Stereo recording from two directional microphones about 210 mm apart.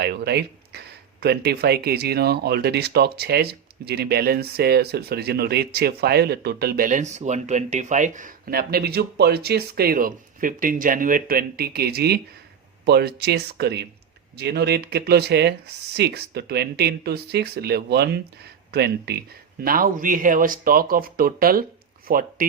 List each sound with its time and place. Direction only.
0.0 s speech: 50° right (ahead or behind)